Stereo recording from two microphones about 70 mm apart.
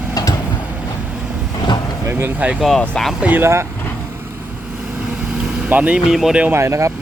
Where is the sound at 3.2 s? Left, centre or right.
Right.